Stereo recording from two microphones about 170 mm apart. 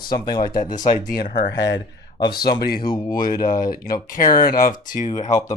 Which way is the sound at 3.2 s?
55° left (ahead or behind).